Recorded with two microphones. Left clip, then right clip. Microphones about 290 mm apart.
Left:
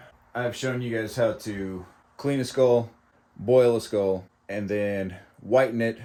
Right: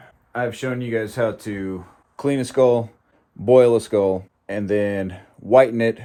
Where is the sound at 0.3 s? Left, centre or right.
Centre.